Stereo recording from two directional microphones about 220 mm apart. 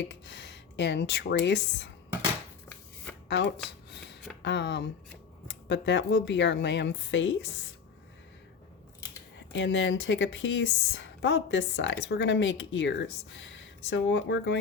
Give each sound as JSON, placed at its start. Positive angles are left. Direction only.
{"t": 0.0, "sound": "speech", "side_deg": 55}
{"t": 3.2, "sound": "speech", "side_deg": 50}
{"t": 9.5, "sound": "a woman's voice", "side_deg": 55}